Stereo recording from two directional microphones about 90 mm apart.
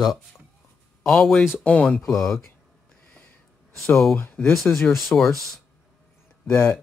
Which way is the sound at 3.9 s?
5° left (ahead or behind).